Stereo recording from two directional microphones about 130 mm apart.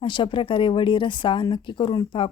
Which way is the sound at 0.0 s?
40° left (ahead or behind).